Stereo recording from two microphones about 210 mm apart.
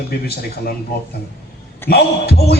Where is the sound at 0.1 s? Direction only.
45° left (ahead or behind).